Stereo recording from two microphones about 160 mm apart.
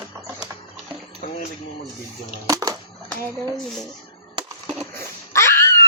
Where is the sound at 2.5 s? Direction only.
20° right (ahead or behind).